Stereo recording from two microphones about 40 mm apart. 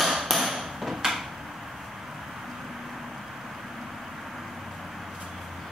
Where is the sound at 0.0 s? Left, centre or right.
Centre.